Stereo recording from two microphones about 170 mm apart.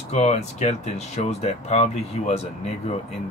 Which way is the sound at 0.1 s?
40° left (ahead or behind).